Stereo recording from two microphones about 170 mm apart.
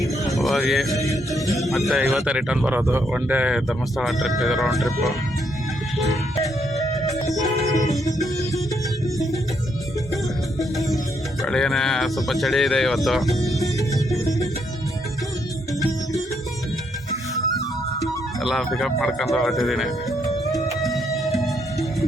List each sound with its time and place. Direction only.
0.3 s speech: centre (ahead or behind)
9.1 s music: centre (ahead or behind)
11.4 s speech: 5° left (ahead or behind)
13.6 s music: 20° left (ahead or behind)
18.0 s speech: centre (ahead or behind)
20.8 s music: centre (ahead or behind)